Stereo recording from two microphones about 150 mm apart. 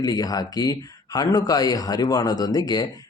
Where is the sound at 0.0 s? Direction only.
25° left (ahead or behind).